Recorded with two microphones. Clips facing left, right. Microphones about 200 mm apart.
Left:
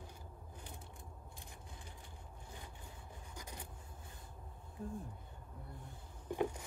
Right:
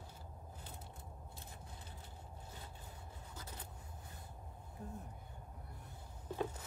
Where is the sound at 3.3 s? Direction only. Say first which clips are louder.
Left 2 dB; 15° left (ahead or behind).